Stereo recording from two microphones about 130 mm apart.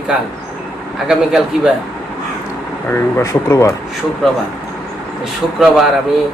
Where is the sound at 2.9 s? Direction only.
20° left (ahead or behind).